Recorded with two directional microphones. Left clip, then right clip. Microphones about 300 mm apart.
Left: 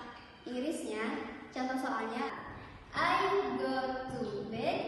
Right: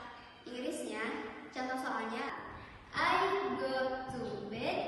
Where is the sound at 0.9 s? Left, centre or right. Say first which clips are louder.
Left 2 dB; centre.